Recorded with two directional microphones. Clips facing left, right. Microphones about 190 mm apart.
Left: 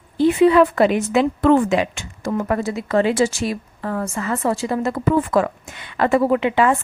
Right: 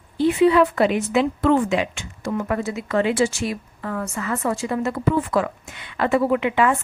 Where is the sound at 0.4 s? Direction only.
50° left (ahead or behind).